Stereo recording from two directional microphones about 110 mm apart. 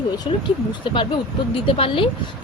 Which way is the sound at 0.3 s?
55° left (ahead or behind).